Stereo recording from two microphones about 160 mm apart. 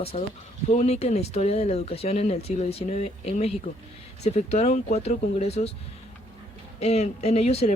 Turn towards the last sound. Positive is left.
turn(degrees=40)  # may be behind; listen again after turning